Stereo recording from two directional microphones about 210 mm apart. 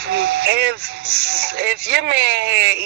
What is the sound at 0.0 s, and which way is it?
Speech, 50° right (ahead or behind).